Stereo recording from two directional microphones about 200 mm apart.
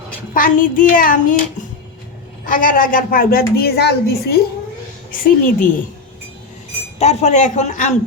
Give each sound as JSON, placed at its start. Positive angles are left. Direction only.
{"t": 0.3, "sound": "a woman's voice", "side_deg": 45}
{"t": 2.5, "sound": "a woman's voice", "side_deg": 45}
{"t": 7.0, "sound": "a man's voice", "side_deg": 35}